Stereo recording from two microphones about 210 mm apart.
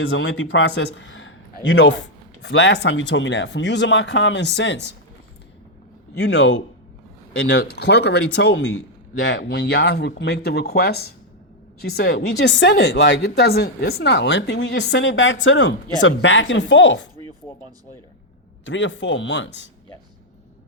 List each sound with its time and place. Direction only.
0.0 s a man's voice: 55° left (ahead or behind)
6.1 s speech: 55° left (ahead or behind)
17.5 s speech: 10° left (ahead or behind)
18.6 s speech: 60° left (ahead or behind)